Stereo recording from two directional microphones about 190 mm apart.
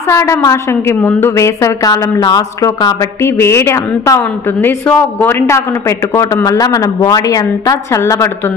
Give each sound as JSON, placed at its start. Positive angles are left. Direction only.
{"t": 0.1, "sound": "a woman's voice", "side_deg": 15}